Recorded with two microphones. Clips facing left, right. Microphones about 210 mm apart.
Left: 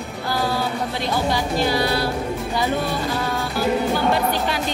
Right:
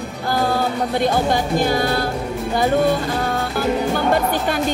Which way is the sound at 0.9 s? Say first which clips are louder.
Right 6 dB; 50° right (ahead or behind).